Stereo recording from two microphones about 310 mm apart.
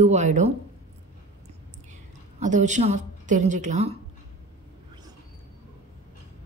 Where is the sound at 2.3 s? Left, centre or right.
Right.